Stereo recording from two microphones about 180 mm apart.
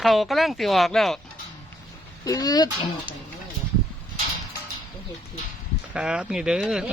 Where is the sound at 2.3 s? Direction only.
20° left (ahead or behind).